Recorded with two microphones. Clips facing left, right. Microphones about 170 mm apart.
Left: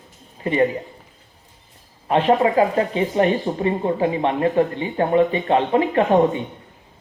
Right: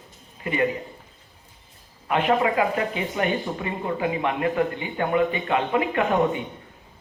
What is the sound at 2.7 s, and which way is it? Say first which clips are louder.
Speech: left 7 dB; 35° left (ahead or behind).